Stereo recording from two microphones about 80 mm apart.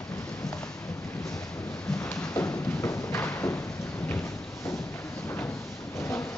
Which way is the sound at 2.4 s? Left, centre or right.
Left.